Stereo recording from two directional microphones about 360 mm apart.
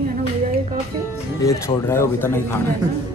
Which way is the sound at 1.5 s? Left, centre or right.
Centre.